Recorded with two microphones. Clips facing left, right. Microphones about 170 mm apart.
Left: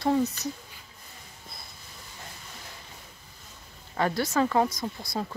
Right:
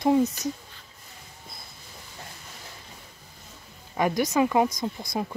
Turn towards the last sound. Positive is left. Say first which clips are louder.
# right 3 dB
turn(degrees=-20)  # may be behind; listen again after turning